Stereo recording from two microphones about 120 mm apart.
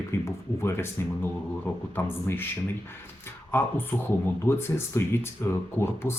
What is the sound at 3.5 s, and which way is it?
Speech, 15° left (ahead or behind).